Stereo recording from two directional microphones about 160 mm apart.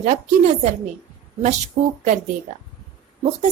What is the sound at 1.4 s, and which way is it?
Speech, 45° right (ahead or behind).